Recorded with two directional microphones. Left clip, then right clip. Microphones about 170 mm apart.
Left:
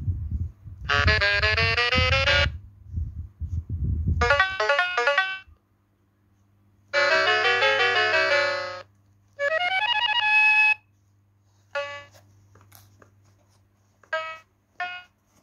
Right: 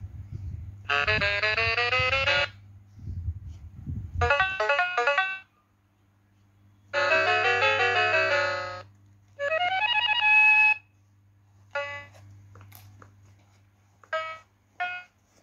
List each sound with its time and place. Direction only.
0.8 s music: 30° left (ahead or behind)
4.2 s music: 30° left (ahead or behind)
6.9 s music: 30° left (ahead or behind)
14.1 s a sound: 35° left (ahead or behind)